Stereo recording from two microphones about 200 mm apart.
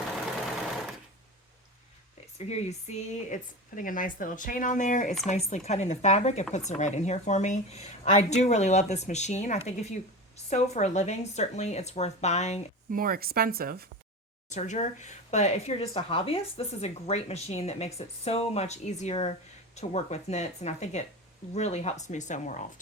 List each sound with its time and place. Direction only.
2.5 s speech: 35° left (ahead or behind)
12.9 s speech: 45° right (ahead or behind)
14.5 s speech: 35° left (ahead or behind)